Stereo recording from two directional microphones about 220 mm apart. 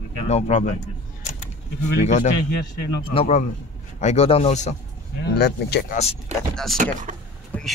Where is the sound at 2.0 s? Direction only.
30° left (ahead or behind).